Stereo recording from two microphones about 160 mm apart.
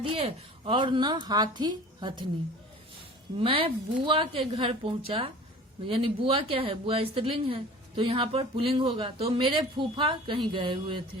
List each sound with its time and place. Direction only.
0.0 s a woman's voice: 35° right (ahead or behind)
3.3 s speech: 35° right (ahead or behind)